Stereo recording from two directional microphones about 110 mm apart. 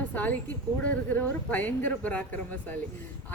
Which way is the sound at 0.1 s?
15° left (ahead or behind).